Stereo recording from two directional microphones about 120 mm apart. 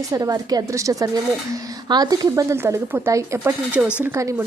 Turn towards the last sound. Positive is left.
turn(degrees=-25)  # may be behind; listen again after turning